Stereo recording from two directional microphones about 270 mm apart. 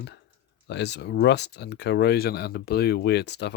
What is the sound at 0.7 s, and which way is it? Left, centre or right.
Speech, left.